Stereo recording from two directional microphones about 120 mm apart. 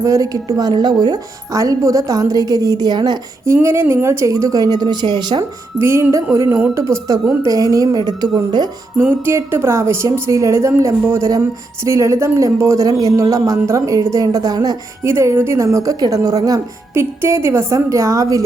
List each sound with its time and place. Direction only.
0.0 s a woman's voice: 30° right (ahead or behind)
5.8 s a woman's voice: 20° right (ahead or behind)
9.0 s speech: 20° right (ahead or behind)
15.0 s speech: 25° right (ahead or behind)
16.9 s speech: 20° right (ahead or behind)